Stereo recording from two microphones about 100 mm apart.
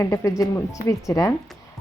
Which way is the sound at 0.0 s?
30° left (ahead or behind).